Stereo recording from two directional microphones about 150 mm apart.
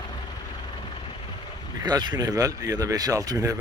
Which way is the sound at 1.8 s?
30° right (ahead or behind).